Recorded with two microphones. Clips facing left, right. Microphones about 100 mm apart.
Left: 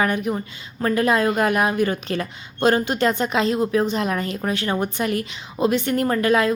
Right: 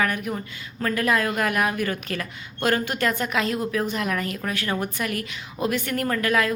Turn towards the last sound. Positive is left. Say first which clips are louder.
# left 4 dB
turn(degrees=25)  # may be behind; listen again after turning